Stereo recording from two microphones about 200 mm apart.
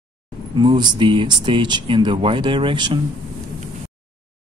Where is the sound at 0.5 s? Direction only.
25° right (ahead or behind).